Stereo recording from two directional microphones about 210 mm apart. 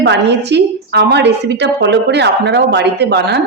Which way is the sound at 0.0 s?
55° right (ahead or behind).